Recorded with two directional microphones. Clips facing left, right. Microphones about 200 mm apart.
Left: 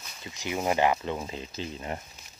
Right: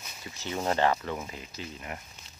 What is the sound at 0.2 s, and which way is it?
Speech, 15° left (ahead or behind).